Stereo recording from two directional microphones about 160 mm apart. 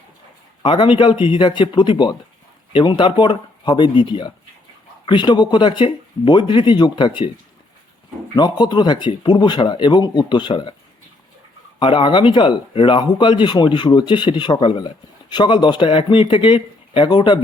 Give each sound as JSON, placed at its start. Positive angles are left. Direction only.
{"t": 0.6, "sound": "speech", "side_deg": 30}
{"t": 8.4, "sound": "speech", "side_deg": 25}
{"t": 11.8, "sound": "speech", "side_deg": 30}